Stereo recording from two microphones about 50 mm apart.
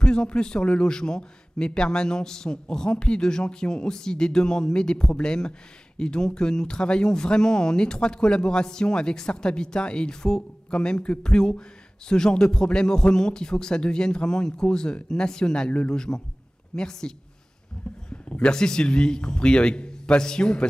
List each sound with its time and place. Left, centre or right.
0.0 s speech: centre
18.1 s a man's voice: left